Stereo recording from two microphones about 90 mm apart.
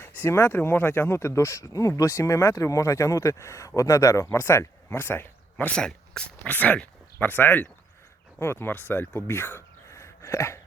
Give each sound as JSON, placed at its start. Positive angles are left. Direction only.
{"t": 0.2, "sound": "speech", "side_deg": 25}
{"t": 5.7, "sound": "speech", "side_deg": 10}